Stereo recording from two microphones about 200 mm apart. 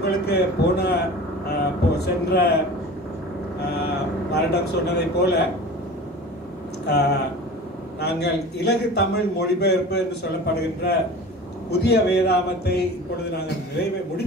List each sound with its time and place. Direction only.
0.0 s speech: 55° left (ahead or behind)
1.5 s a sound: 55° left (ahead or behind)
4.3 s a man's voice: 55° left (ahead or behind)
6.9 s a man's voice: 55° left (ahead or behind)